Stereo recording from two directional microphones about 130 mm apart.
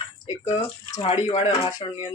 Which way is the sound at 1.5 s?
30° left (ahead or behind).